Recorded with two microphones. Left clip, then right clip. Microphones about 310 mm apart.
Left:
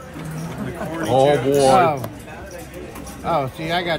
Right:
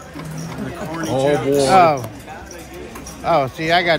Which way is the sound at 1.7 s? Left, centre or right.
Centre.